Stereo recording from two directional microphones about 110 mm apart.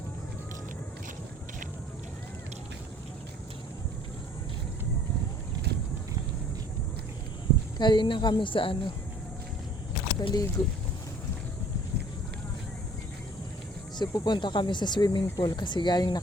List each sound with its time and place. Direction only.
7.8 s speech: 45° left (ahead or behind)
10.2 s speech: 35° left (ahead or behind)
14.0 s speech: 40° left (ahead or behind)